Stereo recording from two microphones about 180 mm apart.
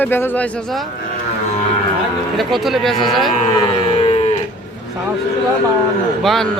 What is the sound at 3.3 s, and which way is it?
Livestock, 30° left (ahead or behind).